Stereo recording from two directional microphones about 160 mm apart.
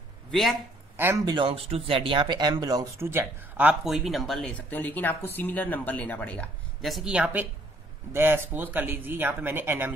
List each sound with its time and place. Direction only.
0.3 s speech: centre (ahead or behind)
0.9 s speech: 15° right (ahead or behind)
1.3 s speech: 35° right (ahead or behind); by 9.9 s 15° right (ahead or behind)